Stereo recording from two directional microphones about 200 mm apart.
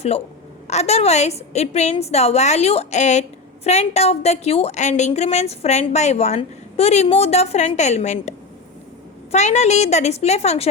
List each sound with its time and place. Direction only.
0.7 s a woman's voice: 35° left (ahead or behind)
9.3 s a woman's voice: 35° left (ahead or behind)